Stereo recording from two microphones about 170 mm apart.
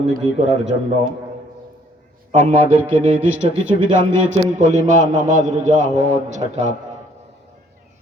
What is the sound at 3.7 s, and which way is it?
A man's voice, 45° right (ahead or behind).